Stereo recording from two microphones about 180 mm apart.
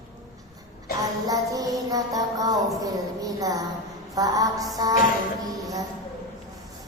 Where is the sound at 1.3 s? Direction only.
20° right (ahead or behind).